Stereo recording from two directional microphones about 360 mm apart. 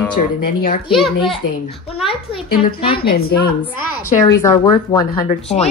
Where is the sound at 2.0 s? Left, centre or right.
Centre.